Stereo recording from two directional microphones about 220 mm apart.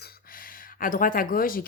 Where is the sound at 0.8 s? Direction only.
40° left (ahead or behind).